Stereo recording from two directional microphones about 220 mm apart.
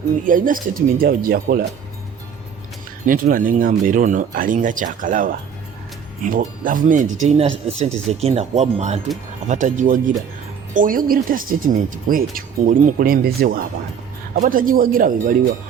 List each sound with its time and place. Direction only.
0.3 s speech: 40° right (ahead or behind)
3.1 s speech: 40° right (ahead or behind)